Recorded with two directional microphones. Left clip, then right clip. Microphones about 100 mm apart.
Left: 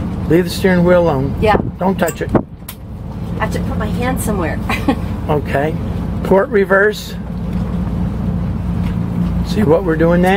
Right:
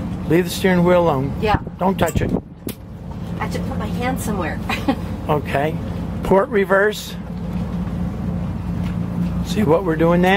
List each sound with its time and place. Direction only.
0.3 s speech: 15° right (ahead or behind)
4.0 s speech: 15° right (ahead or behind)
9.5 s speech: 15° right (ahead or behind)